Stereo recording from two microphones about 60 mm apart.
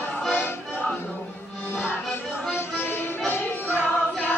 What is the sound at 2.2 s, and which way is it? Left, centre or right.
Music, centre.